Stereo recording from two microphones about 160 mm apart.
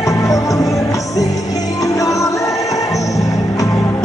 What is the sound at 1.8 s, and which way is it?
Music, 20° left (ahead or behind).